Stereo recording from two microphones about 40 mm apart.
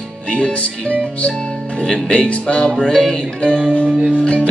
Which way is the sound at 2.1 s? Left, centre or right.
Left.